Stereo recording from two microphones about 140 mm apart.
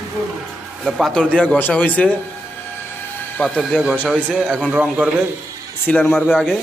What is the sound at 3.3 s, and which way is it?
Speech, 10° left (ahead or behind).